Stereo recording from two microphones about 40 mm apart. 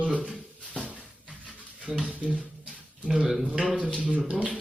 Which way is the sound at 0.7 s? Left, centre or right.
Right.